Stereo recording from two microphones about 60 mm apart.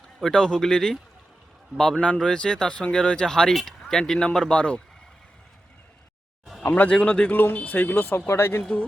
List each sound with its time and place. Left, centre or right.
0.2 s speech: centre
2.1 s speech: centre
6.6 s speech: left
6.8 s speech: centre
7.3 s speech: left
8.3 s speech: left